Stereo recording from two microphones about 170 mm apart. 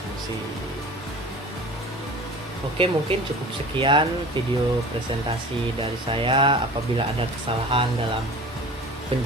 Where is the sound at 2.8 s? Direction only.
30° right (ahead or behind).